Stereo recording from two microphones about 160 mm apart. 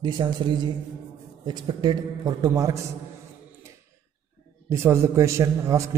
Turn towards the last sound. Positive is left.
turn(degrees=-20)  # may be behind; listen again after turning